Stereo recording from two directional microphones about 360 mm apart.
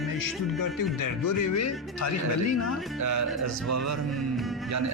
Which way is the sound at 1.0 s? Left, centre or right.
Left.